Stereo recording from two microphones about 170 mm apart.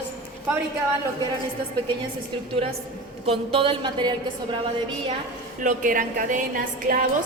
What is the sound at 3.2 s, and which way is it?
A woman's voice, 35° right (ahead or behind).